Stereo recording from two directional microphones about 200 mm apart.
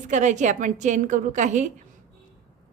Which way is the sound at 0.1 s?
35° right (ahead or behind).